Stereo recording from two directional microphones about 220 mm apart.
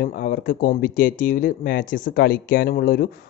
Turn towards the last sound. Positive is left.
turn(degrees=45)  # may be behind; listen again after turning